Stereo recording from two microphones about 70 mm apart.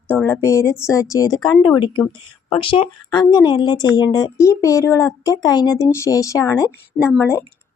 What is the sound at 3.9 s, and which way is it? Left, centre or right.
Speech, left.